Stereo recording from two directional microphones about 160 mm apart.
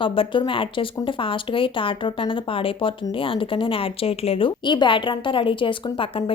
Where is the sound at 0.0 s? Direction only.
35° left (ahead or behind).